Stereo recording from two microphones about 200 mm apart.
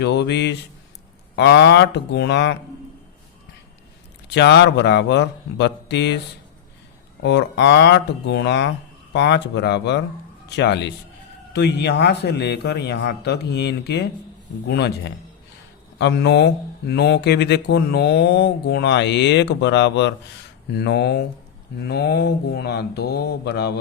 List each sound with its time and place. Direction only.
0.0 s speech: 55° left (ahead or behind)
4.4 s speech: 55° left (ahead or behind)
7.2 s speech: 60° left (ahead or behind)